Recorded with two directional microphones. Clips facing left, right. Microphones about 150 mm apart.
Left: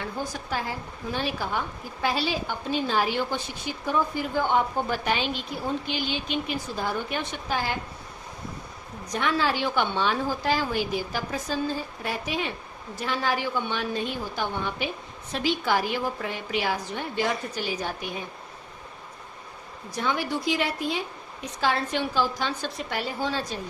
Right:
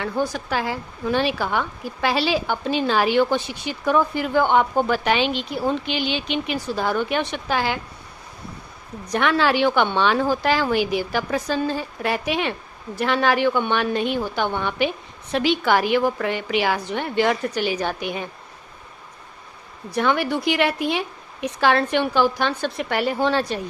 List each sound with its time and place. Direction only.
0.0 s a woman's voice: 75° right (ahead or behind)
9.0 s a woman's voice: 70° right (ahead or behind)
19.9 s a woman's voice: 65° right (ahead or behind)